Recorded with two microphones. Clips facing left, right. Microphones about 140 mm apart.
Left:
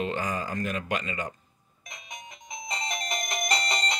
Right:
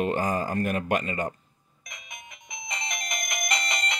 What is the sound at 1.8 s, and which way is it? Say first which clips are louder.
Music: left 2 dB; 35° left (ahead or behind).